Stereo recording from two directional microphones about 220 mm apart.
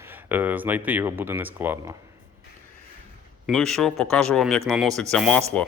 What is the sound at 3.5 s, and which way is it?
Speech, centre (ahead or behind).